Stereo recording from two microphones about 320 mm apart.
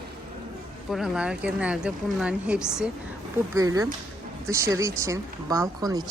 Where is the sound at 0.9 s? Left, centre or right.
Centre.